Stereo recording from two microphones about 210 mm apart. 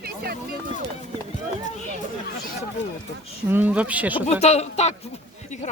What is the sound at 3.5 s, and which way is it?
Speech, 5° right (ahead or behind).